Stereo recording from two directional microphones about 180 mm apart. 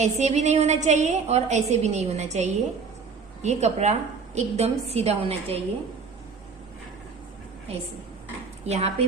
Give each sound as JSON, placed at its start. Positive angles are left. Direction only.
{"t": 0.0, "sound": "a woman's voice", "side_deg": -40}
{"t": 8.6, "sound": "a woman's voice", "side_deg": -35}